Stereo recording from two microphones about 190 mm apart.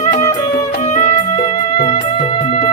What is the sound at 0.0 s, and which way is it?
Music, 35° left (ahead or behind).